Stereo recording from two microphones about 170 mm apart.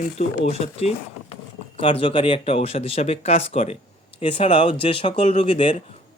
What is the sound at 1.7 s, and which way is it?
Speech, 30° left (ahead or behind).